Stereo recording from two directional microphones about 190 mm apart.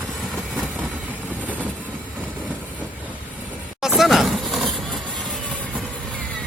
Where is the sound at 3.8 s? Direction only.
Centre (ahead or behind).